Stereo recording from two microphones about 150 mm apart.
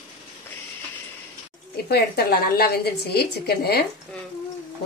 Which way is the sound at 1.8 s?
90° left.